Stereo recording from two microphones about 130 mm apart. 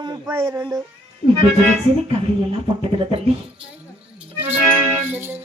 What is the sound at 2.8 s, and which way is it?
Music, 45° right (ahead or behind).